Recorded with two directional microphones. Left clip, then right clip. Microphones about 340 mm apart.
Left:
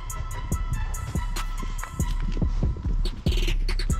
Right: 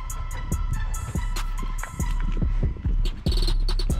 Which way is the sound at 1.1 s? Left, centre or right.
Centre.